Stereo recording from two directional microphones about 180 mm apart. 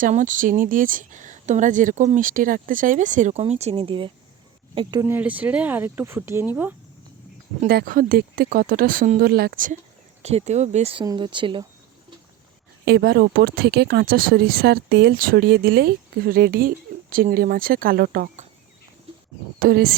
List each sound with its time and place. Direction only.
0.0 s speech: 45° right (ahead or behind); by 6.7 s 10° right (ahead or behind)
7.7 s speech: 55° right (ahead or behind)
10.2 s speech: 40° right (ahead or behind)
11.0 s speech: 25° right (ahead or behind)
12.8 s speech: 60° right (ahead or behind)
19.5 s speech: 60° right (ahead or behind)